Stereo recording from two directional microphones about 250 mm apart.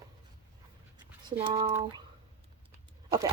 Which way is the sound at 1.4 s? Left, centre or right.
Centre.